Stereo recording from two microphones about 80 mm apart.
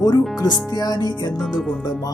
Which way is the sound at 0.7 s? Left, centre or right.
Left.